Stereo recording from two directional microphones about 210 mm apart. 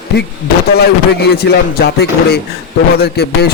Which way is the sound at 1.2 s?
50° left (ahead or behind).